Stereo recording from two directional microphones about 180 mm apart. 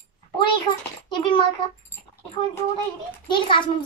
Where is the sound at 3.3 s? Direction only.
25° left (ahead or behind).